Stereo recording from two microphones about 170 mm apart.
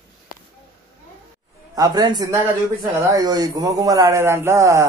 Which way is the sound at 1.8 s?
25° right (ahead or behind).